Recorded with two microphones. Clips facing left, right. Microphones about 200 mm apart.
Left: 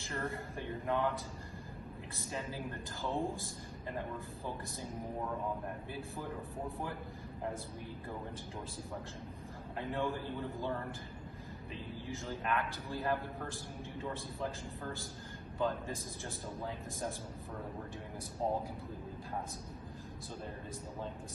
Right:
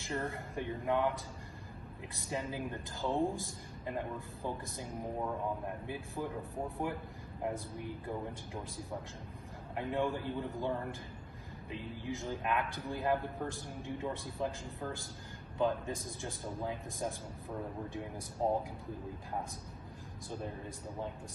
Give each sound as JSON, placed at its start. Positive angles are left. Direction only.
{"t": 0.2, "sound": "a man's voice", "side_deg": -15}
{"t": 2.1, "sound": "a man's voice", "side_deg": -15}
{"t": 6.8, "sound": "a man's voice", "side_deg": -20}
{"t": 9.8, "sound": "a man's voice", "side_deg": -15}
{"t": 18.4, "sound": "a man's voice", "side_deg": -15}